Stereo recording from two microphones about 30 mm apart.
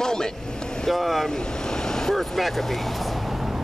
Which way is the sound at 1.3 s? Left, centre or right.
Left.